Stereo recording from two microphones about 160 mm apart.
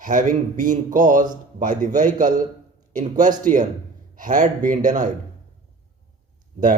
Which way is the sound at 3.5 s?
50° right (ahead or behind).